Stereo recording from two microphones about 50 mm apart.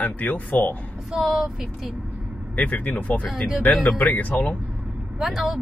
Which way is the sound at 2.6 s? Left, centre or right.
Left.